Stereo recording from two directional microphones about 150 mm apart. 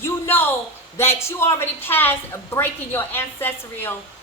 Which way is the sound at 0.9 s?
15° left (ahead or behind).